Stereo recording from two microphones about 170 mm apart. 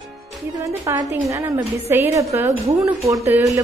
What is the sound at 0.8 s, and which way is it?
A woman's voice, 15° right (ahead or behind).